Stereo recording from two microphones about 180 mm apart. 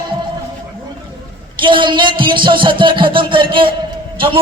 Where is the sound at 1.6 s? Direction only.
25° right (ahead or behind).